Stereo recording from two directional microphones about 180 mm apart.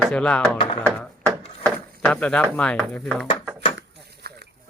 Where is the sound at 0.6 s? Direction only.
30° left (ahead or behind).